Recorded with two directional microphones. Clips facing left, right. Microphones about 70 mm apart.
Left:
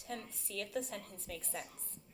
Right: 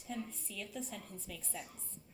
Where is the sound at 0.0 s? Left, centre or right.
Left.